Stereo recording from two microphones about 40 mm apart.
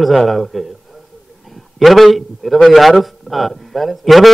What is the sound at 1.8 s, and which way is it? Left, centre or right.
A man's voice, centre.